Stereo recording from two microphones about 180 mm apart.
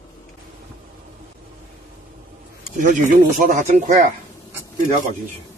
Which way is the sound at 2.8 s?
45° right (ahead or behind).